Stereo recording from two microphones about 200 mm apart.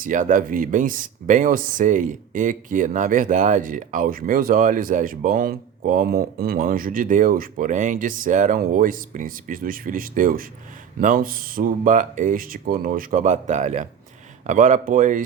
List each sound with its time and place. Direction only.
0.0 s speech: 40° right (ahead or behind)